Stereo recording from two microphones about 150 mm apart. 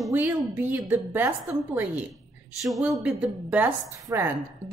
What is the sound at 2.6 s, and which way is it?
Speech, centre (ahead or behind).